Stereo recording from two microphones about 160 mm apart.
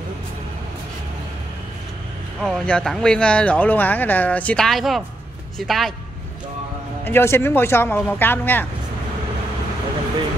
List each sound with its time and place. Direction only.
2.4 s speech: 5° left (ahead or behind)
7.1 s speech: 15° left (ahead or behind)